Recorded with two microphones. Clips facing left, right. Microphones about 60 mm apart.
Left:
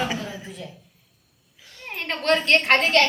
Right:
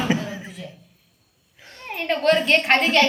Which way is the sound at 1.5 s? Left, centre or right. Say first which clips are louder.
Right 5 dB; right.